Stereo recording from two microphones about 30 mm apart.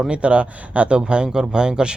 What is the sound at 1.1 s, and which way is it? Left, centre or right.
Speech, right.